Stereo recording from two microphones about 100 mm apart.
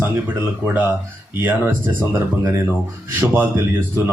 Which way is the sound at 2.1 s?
25° right (ahead or behind).